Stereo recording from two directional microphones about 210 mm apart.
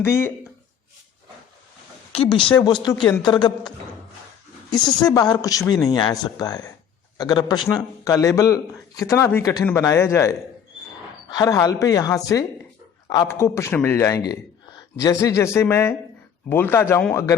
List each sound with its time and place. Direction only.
0.0 s speech: 10° left (ahead or behind)
2.1 s speech: 25° left (ahead or behind)
4.7 s speech: 20° left (ahead or behind)